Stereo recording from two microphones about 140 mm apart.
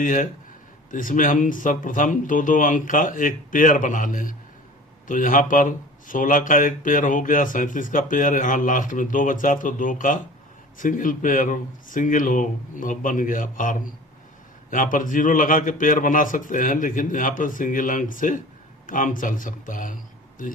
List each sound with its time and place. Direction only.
0.0 s speech: 65° left (ahead or behind)